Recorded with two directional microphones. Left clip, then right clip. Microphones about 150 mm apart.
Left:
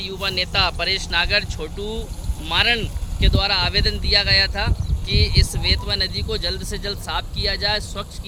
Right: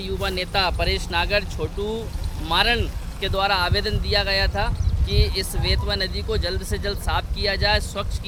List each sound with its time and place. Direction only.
0.0 s speech: 80° right; by 8.0 s 15° right (ahead or behind)